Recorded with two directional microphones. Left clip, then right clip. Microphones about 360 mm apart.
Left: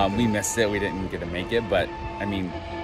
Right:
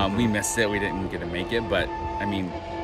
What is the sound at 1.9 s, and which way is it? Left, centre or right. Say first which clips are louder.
Music: right 4 dB; right.